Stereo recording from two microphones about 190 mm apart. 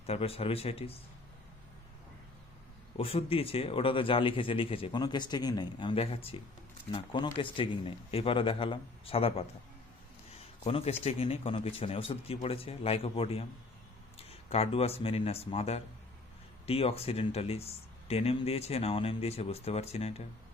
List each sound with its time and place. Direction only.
0.0 s speech: 30° left (ahead or behind)
3.0 s speech: 30° left (ahead or behind)